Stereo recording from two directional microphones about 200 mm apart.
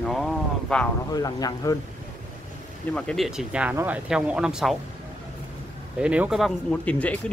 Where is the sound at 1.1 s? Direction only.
20° left (ahead or behind).